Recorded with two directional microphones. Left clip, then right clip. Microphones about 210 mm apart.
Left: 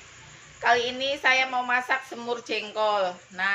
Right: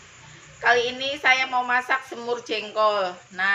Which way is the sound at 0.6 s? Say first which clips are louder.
Right 2 dB; centre (ahead or behind).